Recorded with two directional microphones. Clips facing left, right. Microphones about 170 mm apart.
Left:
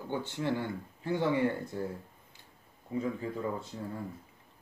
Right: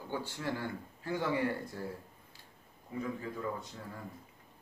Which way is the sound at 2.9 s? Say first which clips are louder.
Left 5 dB; 20° left (ahead or behind).